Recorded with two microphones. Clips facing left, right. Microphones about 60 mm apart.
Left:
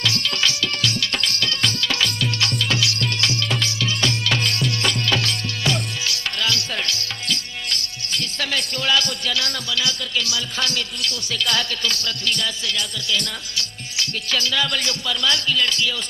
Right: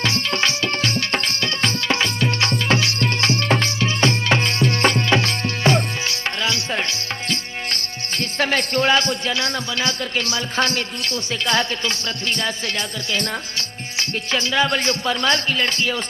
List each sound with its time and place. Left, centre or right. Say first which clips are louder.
0.0 s music: right 2 dB; right